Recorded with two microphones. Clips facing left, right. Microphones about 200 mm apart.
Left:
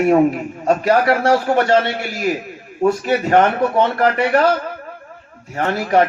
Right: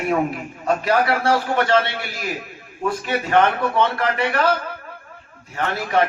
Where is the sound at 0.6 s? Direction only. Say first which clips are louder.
Left 4 dB; 40° left (ahead or behind).